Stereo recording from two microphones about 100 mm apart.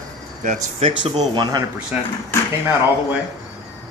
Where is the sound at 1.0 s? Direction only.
45° right (ahead or behind).